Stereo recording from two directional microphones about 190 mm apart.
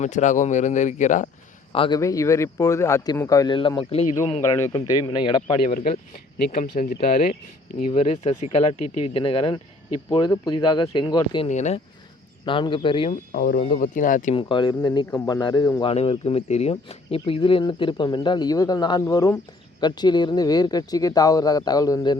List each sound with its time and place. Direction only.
0.0 s speech: 40° left (ahead or behind)
1.7 s speech: 30° left (ahead or behind)
2.0 s speech: 15° left (ahead or behind)
4.4 s speech: 15° left (ahead or behind)
5.6 s speech: 50° left (ahead or behind)
7.9 s speech: 35° left (ahead or behind)
11.4 s speech: 35° left (ahead or behind)
12.5 s speech: 25° left (ahead or behind)
13.3 s speech: 50° left (ahead or behind)
14.3 s speech: 25° left (ahead or behind)
15.8 s speech: 30° left (ahead or behind)